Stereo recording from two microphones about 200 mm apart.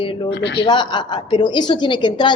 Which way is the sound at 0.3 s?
60° left (ahead or behind).